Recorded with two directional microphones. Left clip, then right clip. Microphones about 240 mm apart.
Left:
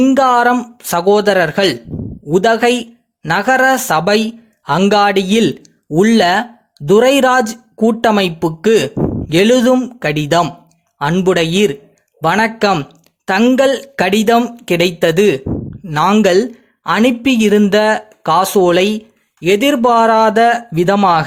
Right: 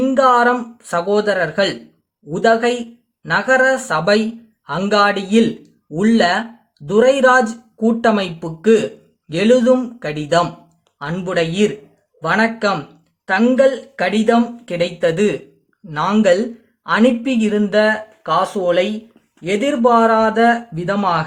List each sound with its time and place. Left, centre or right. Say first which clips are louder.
0.0 s speech: left 2 dB; left